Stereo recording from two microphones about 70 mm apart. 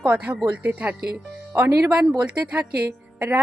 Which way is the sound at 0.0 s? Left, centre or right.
Centre.